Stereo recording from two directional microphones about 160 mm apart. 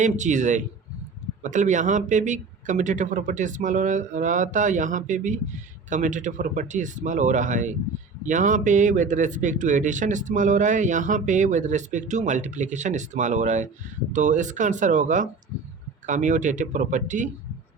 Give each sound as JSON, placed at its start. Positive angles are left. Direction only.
{"t": 0.0, "sound": "a man's voice", "side_deg": -50}